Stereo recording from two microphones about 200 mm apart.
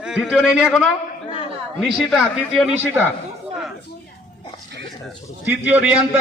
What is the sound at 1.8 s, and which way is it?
A man's voice, centre (ahead or behind).